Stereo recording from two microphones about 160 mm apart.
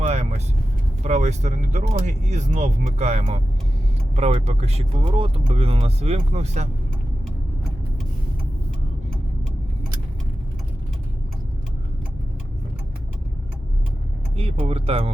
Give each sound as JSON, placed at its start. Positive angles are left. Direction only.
{"t": 0.0, "sound": "vehicle", "side_deg": -40}
{"t": 1.0, "sound": "speech", "side_deg": -45}
{"t": 14.3, "sound": "speech", "side_deg": -35}